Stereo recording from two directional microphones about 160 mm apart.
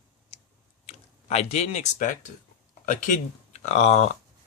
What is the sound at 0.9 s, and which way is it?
Speech, 40° left (ahead or behind).